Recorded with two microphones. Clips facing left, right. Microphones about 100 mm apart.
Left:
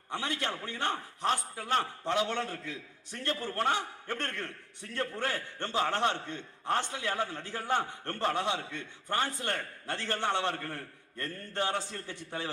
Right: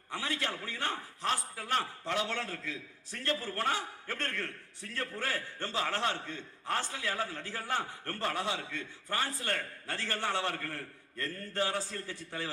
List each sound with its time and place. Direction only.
0.1 s a man's voice: 20° left (ahead or behind)